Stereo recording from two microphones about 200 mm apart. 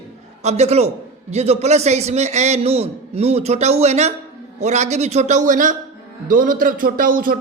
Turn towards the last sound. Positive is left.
turn(degrees=-45)  # may be behind; listen again after turning